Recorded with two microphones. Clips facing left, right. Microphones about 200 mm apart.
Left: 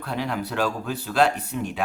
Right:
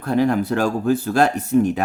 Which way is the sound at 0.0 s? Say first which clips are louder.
Right 10 dB; 45° right (ahead or behind).